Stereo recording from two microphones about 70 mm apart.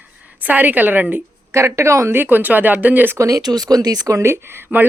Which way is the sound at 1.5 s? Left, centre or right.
Right.